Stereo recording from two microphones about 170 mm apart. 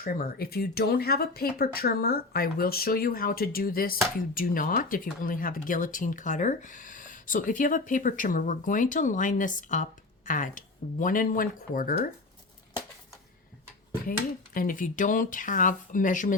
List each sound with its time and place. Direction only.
0.0 s speech: 65° left (ahead or behind)
14.1 s speech: 55° left (ahead or behind)